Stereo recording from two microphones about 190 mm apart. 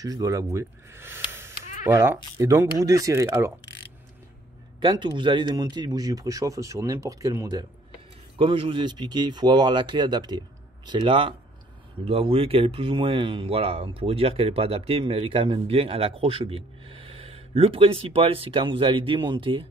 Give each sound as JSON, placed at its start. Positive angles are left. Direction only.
{"t": 0.0, "sound": "speech", "side_deg": -20}
{"t": 4.7, "sound": "speech", "side_deg": -25}